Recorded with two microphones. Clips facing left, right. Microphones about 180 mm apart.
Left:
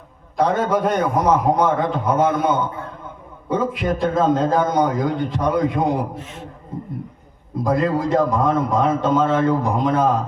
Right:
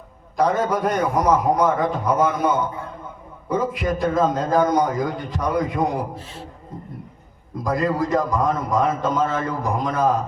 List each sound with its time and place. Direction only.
0.3 s a man's voice: 25° left (ahead or behind)
6.1 s a man's voice: 35° right (ahead or behind)
7.6 s a man's voice: 25° left (ahead or behind)